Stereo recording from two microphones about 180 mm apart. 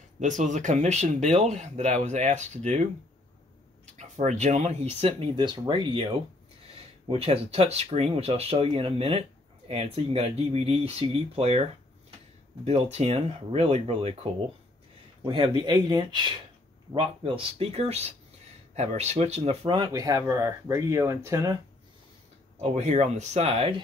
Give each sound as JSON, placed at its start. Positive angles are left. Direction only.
{"t": 0.2, "sound": "speech", "side_deg": -45}
{"t": 3.9, "sound": "speech", "side_deg": -40}
{"t": 15.2, "sound": "speech", "side_deg": -25}
{"t": 22.6, "sound": "speech", "side_deg": -40}